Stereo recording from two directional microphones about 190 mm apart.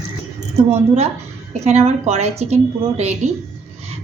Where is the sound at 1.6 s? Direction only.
35° right (ahead or behind).